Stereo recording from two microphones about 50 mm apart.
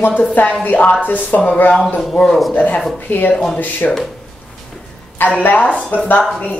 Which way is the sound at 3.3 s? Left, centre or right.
Centre.